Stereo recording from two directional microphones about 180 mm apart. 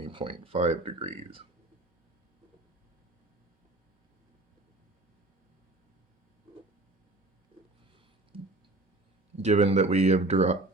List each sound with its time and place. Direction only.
0.0 s speech: 30° right (ahead or behind)
9.4 s speech: 35° right (ahead or behind)